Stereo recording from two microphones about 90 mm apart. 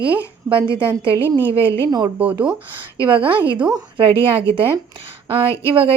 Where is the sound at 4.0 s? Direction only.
85° right.